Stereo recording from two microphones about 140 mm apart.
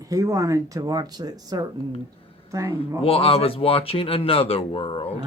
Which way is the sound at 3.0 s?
45° left (ahead or behind).